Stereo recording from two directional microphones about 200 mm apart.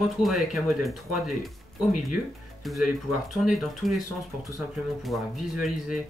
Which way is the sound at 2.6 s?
Centre (ahead or behind).